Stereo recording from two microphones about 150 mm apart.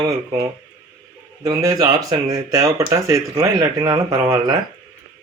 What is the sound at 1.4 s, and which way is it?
Speech, 25° right (ahead or behind).